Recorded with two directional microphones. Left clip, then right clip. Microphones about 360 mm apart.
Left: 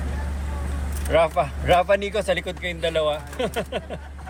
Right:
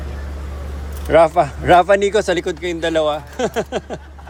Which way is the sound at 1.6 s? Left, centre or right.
Right.